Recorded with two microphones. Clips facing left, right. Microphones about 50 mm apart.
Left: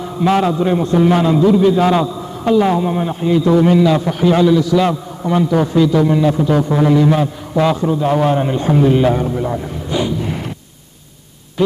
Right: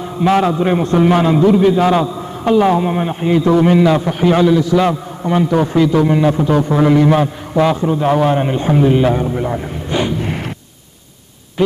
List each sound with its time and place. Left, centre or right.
0.0 s a man's voice: right
0.7 s a man's voice: right
2.0 s a man's voice: right
5.2 s a man's voice: right
5.5 s a man's voice: right
7.7 s a man's voice: right; by 9.3 s centre
9.3 s a man's voice: right
9.8 s a sound: right